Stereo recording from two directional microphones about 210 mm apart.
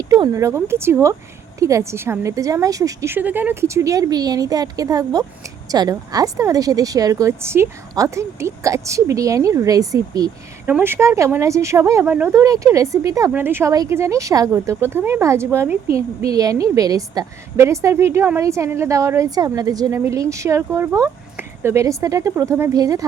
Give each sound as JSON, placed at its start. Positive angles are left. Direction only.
{"t": 0.1, "sound": "speech", "side_deg": -15}